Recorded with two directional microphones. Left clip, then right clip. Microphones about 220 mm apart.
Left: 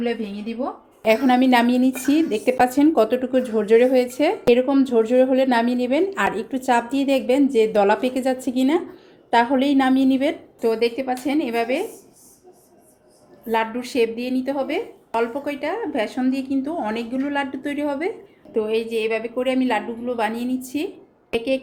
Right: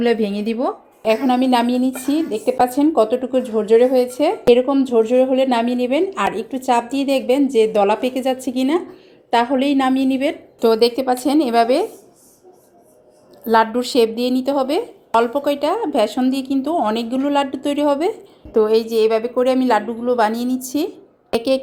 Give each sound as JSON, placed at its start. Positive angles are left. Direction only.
{"t": 0.0, "sound": "a woman's voice", "side_deg": -40}
{"t": 1.0, "sound": "a woman's voice", "side_deg": 0}
{"t": 10.6, "sound": "a woman's voice", "side_deg": -30}
{"t": 13.5, "sound": "a woman's voice", "side_deg": -30}